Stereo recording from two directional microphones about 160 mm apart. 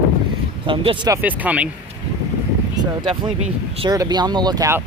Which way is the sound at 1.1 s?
10° right (ahead or behind).